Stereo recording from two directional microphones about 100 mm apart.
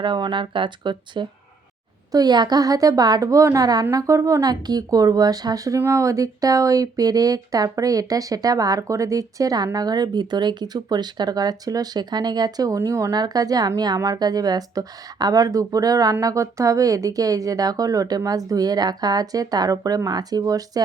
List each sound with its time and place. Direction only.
0.0 s speech: 50° right (ahead or behind)